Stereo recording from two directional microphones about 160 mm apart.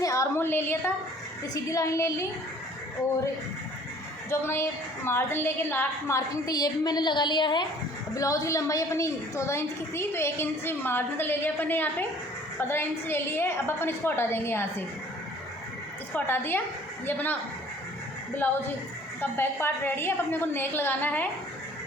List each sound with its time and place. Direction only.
0.0 s a sound: 20° left (ahead or behind)
1.7 s a woman's voice: 20° left (ahead or behind)
4.3 s a woman's voice: 15° left (ahead or behind)
16.1 s a woman's voice: 15° left (ahead or behind)
19.2 s a woman's voice: 15° left (ahead or behind)